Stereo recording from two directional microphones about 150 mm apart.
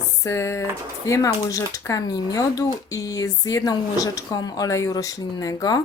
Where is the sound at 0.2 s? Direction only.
20° left (ahead or behind).